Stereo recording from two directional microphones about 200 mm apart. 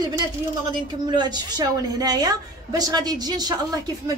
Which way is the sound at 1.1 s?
20° right (ahead or behind).